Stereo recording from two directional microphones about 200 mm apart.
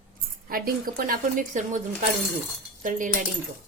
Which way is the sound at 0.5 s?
45° right (ahead or behind).